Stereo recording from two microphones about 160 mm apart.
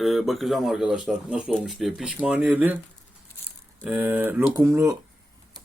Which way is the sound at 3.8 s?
10° right (ahead or behind).